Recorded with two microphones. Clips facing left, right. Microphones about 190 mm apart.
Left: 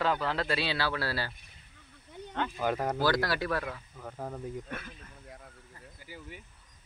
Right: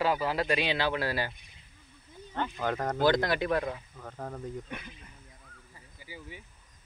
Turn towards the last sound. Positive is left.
turn(degrees=-10)  # may be behind; listen again after turning